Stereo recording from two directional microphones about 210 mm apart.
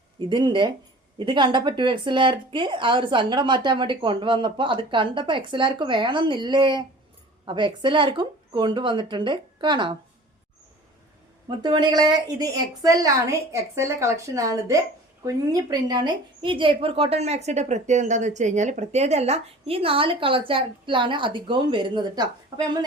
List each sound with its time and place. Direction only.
0.2 s a woman's voice: 20° right (ahead or behind)
11.4 s a woman's voice: 20° right (ahead or behind)